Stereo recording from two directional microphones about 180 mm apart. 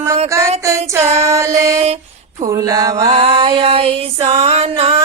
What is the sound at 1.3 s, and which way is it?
Music, 15° right (ahead or behind).